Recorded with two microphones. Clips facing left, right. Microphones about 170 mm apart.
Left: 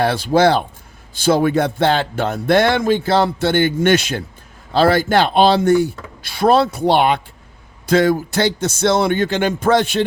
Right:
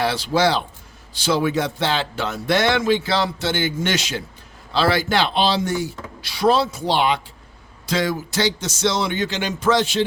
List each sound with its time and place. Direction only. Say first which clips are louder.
0.0 s speech: left 5 dB; 55° left (ahead or behind)